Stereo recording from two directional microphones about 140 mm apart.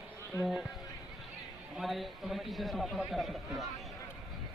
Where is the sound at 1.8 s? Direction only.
Centre (ahead or behind).